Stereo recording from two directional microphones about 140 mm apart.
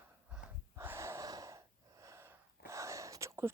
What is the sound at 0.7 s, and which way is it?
Wheeze, 20° right (ahead or behind).